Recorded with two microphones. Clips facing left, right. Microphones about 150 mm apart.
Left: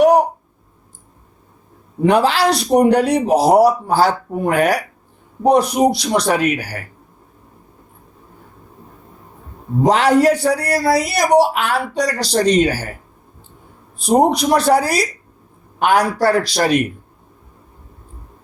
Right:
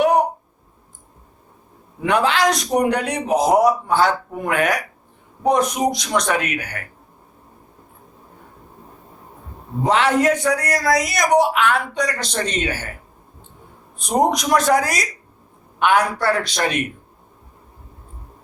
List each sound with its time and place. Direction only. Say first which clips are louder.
2.0 s a man's voice: left 4 dB; 35° left (ahead or behind)
9.8 s a man's voice: left 4 dB; 35° left (ahead or behind)
14.0 s a man's voice: left 5 dB; 30° left (ahead or behind)